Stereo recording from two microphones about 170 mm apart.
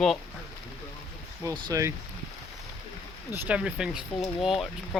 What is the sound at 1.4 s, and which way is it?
Speech, 25° right (ahead or behind).